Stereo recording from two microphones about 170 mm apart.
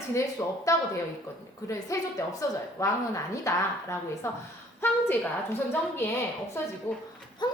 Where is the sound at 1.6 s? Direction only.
15° left (ahead or behind).